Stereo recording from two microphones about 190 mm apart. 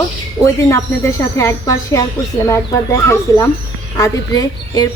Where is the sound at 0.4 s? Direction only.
15° left (ahead or behind).